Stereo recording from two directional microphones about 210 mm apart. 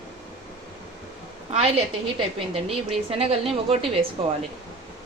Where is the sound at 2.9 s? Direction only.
25° right (ahead or behind).